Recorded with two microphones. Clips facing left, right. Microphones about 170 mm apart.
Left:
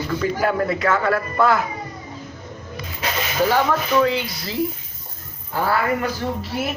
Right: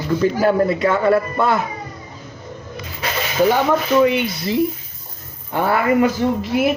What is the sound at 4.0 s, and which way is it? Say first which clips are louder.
A man's voice: right 4 dB; 20° right (ahead or behind).